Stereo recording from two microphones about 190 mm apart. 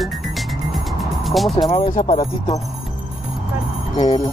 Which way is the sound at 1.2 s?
Centre (ahead or behind).